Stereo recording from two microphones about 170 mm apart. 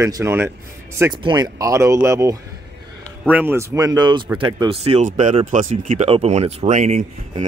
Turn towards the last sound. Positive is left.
turn(degrees=-40)  # may be behind; listen again after turning